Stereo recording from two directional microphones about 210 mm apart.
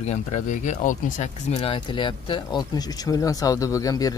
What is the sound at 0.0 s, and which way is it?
Speech, 35° left (ahead or behind).